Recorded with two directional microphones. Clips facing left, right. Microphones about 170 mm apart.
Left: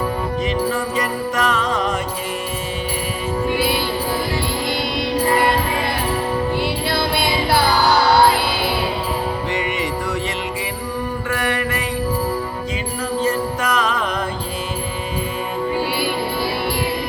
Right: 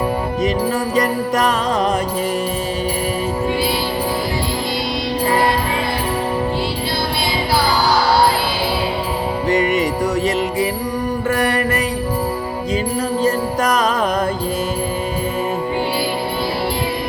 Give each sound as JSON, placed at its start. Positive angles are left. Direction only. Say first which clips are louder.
{"t": 0.9, "sound": "music", "louder": "right 4 dB", "side_deg": -35}
{"t": 9.5, "sound": "music", "louder": "right 7 dB", "side_deg": -40}
{"t": 11.3, "sound": "mantra", "louder": "right 5 dB", "side_deg": -40}
{"t": 13.2, "sound": "music", "louder": "right 3 dB", "side_deg": -40}